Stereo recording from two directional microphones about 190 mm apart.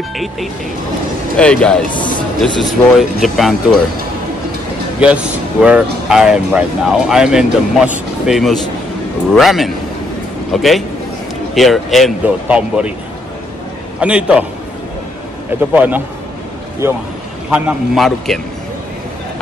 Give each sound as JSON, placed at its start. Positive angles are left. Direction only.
{"t": 1.3, "sound": "speech", "side_deg": 5}
{"t": 5.0, "sound": "speech", "side_deg": -5}
{"t": 13.9, "sound": "a man's voice", "side_deg": -5}
{"t": 15.6, "sound": "a man's voice", "side_deg": -10}
{"t": 17.5, "sound": "speech", "side_deg": -5}